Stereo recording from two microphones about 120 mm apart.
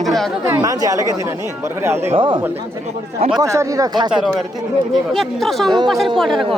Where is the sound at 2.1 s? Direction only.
45° right (ahead or behind).